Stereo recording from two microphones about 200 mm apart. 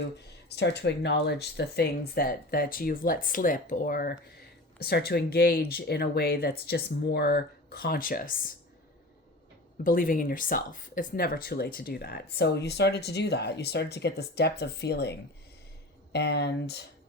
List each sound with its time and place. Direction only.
0.5 s speech: 55° left (ahead or behind)
9.8 s speech: 45° left (ahead or behind)
16.1 s speech: 55° left (ahead or behind)